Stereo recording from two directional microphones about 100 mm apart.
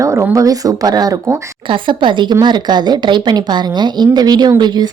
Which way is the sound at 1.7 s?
55° right (ahead or behind).